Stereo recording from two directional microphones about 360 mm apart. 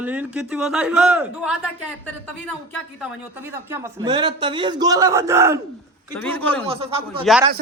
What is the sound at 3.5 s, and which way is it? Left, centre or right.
A man's voice, centre.